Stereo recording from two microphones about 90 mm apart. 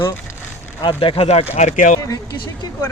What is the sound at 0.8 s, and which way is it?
Speech, 70° left (ahead or behind).